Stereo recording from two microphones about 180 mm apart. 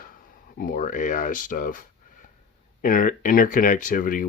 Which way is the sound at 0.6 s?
50° left (ahead or behind).